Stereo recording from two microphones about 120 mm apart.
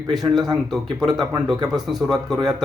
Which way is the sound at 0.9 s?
Centre (ahead or behind).